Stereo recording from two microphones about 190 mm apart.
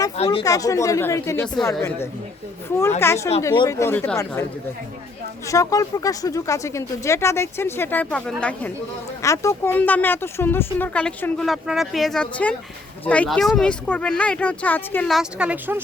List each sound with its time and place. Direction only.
0.3 s speech: 20° left (ahead or behind)
3.0 s speech: 15° left (ahead or behind)
5.5 s speech: 15° left (ahead or behind); by 15.8 s 10° right (ahead or behind)